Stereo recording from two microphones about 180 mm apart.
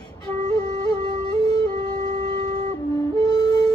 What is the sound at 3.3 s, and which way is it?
Music, 20° left (ahead or behind).